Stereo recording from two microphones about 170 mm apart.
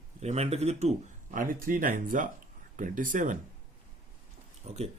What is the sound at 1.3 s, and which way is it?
Speech, 50° right (ahead or behind).